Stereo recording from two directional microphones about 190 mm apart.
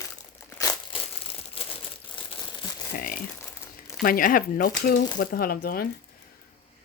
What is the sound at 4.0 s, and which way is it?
A woman's voice, 45° left (ahead or behind).